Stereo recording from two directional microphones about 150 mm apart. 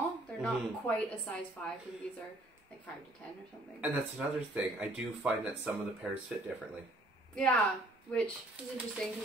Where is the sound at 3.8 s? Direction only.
10° right (ahead or behind).